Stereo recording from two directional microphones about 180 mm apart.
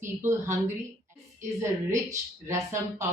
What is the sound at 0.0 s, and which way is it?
Speech, 15° right (ahead or behind).